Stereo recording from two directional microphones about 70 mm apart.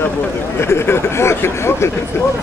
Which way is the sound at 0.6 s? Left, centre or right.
Left.